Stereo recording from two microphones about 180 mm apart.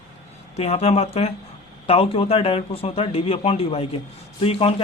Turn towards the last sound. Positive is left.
turn(degrees=30)  # may be behind; listen again after turning